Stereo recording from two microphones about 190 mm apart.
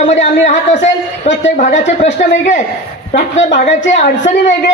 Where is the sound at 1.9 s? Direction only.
40° left (ahead or behind).